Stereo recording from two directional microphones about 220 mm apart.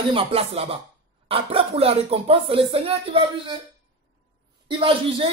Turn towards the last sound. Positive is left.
turn(degrees=-20)  # may be behind; listen again after turning